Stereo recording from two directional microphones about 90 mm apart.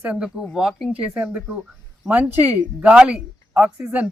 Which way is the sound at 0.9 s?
15° right (ahead or behind).